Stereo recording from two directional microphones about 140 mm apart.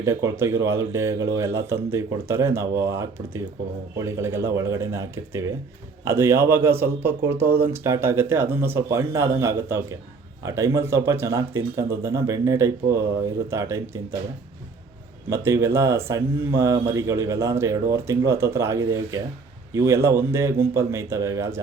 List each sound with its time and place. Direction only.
0.0 s speech: 20° right (ahead or behind)
15.3 s speech: 20° right (ahead or behind)